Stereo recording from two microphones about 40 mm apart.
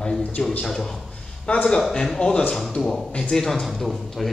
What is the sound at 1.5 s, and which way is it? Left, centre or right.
Speech, left.